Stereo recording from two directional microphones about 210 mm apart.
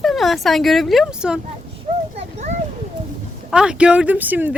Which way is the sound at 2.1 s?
30° right (ahead or behind).